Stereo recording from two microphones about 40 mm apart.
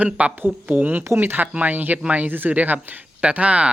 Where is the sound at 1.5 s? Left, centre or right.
Right.